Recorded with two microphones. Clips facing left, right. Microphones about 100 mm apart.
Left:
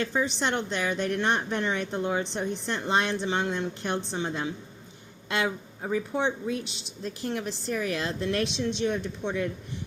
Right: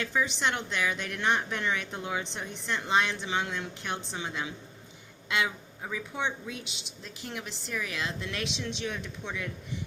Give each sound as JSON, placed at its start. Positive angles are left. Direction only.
{"t": 0.0, "sound": "a woman's voice", "side_deg": 35}